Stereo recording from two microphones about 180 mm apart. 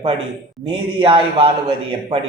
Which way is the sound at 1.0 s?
30° right (ahead or behind).